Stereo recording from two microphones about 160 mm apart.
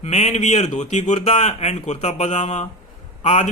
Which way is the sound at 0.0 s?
45° left (ahead or behind).